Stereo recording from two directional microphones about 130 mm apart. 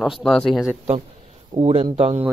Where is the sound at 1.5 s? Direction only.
50° right (ahead or behind).